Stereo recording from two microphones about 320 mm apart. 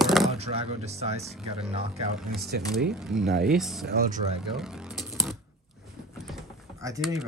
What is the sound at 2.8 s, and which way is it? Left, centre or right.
Speech, centre.